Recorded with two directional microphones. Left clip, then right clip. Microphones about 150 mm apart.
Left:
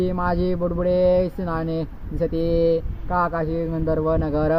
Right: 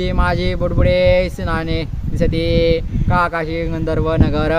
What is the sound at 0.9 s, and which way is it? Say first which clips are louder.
Speech: right 4 dB; 55° right (ahead or behind).